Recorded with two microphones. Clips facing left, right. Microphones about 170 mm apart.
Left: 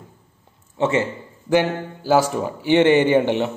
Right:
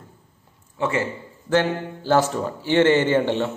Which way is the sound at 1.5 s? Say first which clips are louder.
Left 2 dB; 10° left (ahead or behind).